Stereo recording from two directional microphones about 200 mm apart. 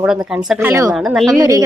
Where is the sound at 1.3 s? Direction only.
15° right (ahead or behind).